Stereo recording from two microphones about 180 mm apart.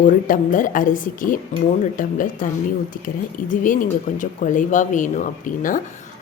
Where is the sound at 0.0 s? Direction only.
45° left (ahead or behind).